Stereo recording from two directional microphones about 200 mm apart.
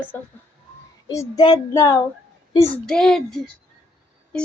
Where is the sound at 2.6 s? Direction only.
5° left (ahead or behind).